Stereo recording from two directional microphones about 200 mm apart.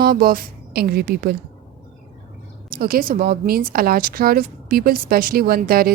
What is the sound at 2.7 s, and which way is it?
A woman's voice, 50° right (ahead or behind).